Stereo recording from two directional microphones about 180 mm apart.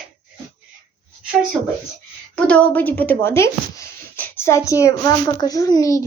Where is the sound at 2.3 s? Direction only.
5° left (ahead or behind).